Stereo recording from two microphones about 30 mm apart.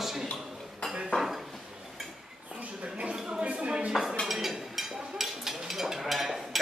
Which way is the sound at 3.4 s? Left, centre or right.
Right.